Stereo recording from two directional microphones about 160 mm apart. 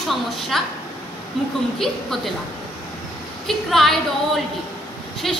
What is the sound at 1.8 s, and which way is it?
Speech, centre (ahead or behind).